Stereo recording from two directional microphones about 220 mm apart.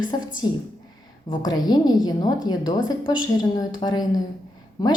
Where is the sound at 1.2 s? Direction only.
20° left (ahead or behind).